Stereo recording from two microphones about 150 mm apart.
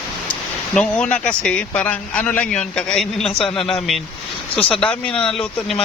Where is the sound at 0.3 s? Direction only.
5° left (ahead or behind).